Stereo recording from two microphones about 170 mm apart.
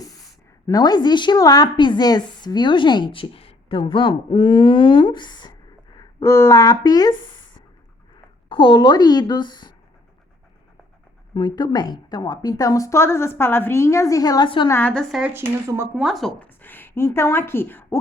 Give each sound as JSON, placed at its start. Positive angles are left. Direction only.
{"t": 0.7, "sound": "a woman's voice", "side_deg": 25}
{"t": 8.4, "sound": "a woman's voice", "side_deg": 30}
{"t": 11.3, "sound": "a woman's voice", "side_deg": 25}
{"t": 14.7, "sound": "speech", "side_deg": 10}
{"t": 15.3, "sound": "speech", "side_deg": -15}
{"t": 16.0, "sound": "a woman's voice", "side_deg": 0}